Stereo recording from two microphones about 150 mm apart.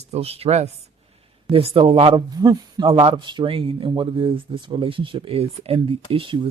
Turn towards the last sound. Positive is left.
turn(degrees=-35)  # may be behind; listen again after turning